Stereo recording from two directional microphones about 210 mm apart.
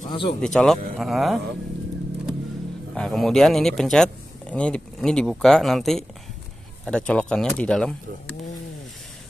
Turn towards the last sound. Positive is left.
turn(degrees=5)  # may be behind; listen again after turning